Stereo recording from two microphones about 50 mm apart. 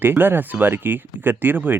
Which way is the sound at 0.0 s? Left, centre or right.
Right.